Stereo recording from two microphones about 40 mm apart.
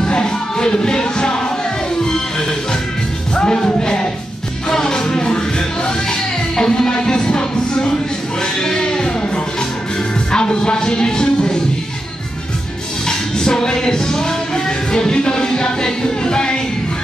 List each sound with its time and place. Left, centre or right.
0.0 s music: centre
13.0 s music: centre